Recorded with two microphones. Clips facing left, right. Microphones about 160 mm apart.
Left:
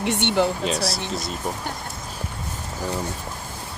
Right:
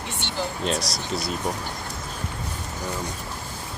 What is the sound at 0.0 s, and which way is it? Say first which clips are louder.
Speech: left 10 dB; 65° left (ahead or behind).